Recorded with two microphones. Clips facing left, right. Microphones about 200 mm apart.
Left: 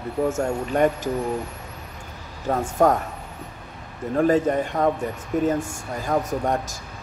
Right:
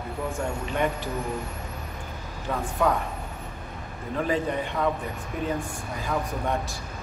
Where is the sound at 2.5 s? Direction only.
45° left (ahead or behind).